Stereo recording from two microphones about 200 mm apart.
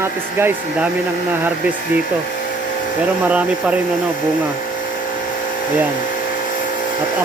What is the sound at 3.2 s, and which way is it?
Speech, 5° right (ahead or behind).